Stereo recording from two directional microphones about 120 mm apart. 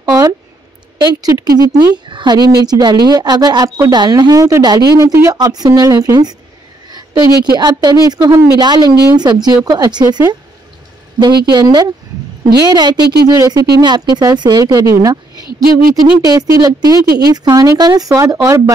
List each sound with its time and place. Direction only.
0.0 s a sound: 30° right (ahead or behind)
0.9 s speech: 35° right (ahead or behind)
5.0 s speech: 25° right (ahead or behind)